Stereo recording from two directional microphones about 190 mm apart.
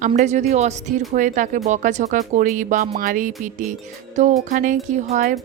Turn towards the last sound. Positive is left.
turn(degrees=-40)  # may be behind; listen again after turning